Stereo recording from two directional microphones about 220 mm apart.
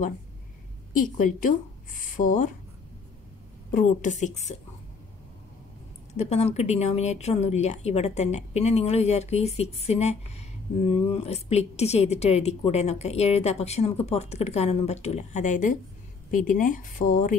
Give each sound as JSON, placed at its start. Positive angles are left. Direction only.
{"t": 1.1, "sound": "speech", "side_deg": 35}
{"t": 3.7, "sound": "speech", "side_deg": 35}
{"t": 6.1, "sound": "speech", "side_deg": 30}